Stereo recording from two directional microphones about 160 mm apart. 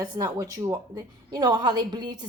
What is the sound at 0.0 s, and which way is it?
Speech, 20° right (ahead or behind).